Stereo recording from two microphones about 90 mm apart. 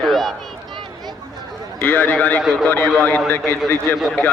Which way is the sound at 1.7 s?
25° left (ahead or behind).